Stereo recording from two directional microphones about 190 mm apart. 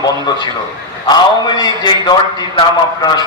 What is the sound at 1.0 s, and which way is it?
A man's voice, 20° left (ahead or behind).